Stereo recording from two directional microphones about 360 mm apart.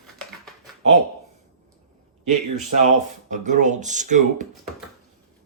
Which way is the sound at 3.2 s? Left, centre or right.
Right.